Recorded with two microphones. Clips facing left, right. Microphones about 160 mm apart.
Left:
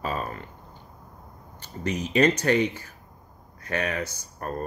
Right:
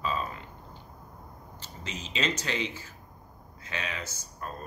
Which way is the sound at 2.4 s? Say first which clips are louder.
Left 10 dB; 60° left (ahead or behind).